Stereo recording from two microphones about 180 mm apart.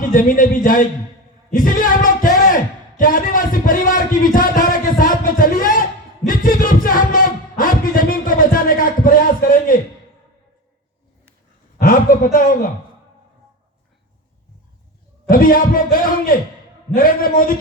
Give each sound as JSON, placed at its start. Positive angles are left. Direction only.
{"t": 0.1, "sound": "a man's voice", "side_deg": 50}
{"t": 1.5, "sound": "a sound", "side_deg": 50}
{"t": 11.8, "sound": "a man's voice", "side_deg": 50}
{"t": 15.3, "sound": "a man's voice", "side_deg": 50}